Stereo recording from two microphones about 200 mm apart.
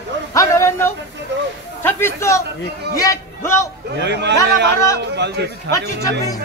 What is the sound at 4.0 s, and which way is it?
A man's voice, 60° right (ahead or behind).